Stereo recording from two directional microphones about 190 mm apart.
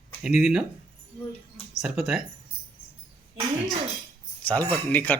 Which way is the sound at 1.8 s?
5° right (ahead or behind).